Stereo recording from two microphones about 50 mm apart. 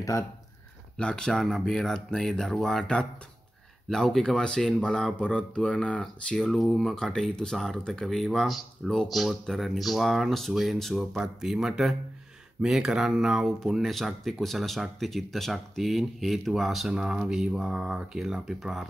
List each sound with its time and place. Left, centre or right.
0.9 s speech: centre
1.4 s speech: centre
5.2 s speech: left
6.3 s speech: centre
11.1 s speech: centre
16.9 s speech: centre